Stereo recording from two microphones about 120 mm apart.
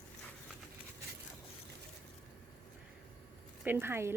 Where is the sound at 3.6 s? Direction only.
20° right (ahead or behind).